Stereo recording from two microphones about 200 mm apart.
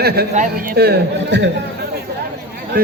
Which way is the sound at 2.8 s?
45° right (ahead or behind).